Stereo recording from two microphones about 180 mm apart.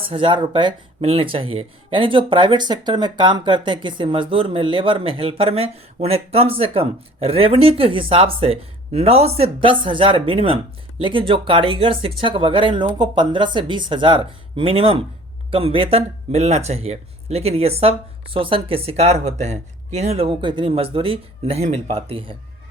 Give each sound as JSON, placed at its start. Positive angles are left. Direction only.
{"t": 0.0, "sound": "speech", "side_deg": -30}